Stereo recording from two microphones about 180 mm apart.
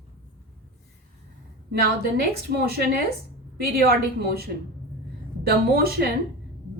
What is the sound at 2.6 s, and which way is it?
Speech, 60° right (ahead or behind).